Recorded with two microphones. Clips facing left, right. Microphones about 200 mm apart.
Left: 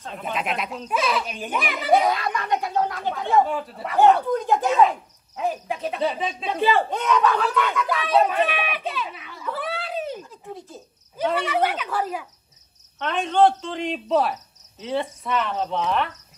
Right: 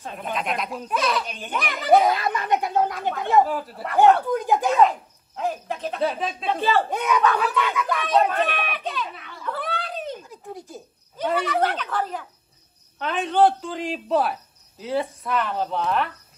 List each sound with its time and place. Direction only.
0.2 s speech: centre (ahead or behind)
2.1 s speech: 25° right (ahead or behind)
3.3 s speech: centre (ahead or behind)
6.9 s a sound: 10° right (ahead or behind)
11.4 s speech: 5° left (ahead or behind)